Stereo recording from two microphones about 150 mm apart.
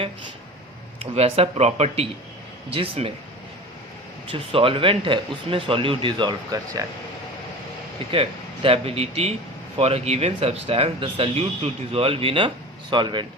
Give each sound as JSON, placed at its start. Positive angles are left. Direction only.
{"t": 0.9, "sound": "speech", "side_deg": -45}
{"t": 4.3, "sound": "speech", "side_deg": -40}
{"t": 8.1, "sound": "speech", "side_deg": -40}